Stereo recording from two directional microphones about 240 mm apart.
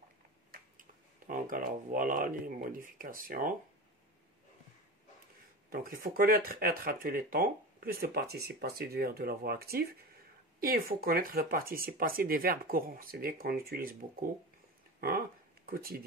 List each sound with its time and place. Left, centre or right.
0.5 s speech: right
5.7 s speech: right
15.0 s a sound: right